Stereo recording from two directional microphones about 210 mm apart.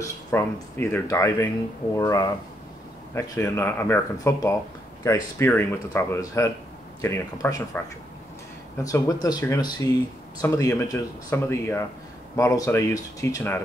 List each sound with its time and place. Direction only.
0.0 s speech: 10° left (ahead or behind)